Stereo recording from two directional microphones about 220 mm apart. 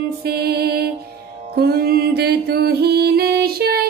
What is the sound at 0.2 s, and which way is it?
Music, 45° right (ahead or behind).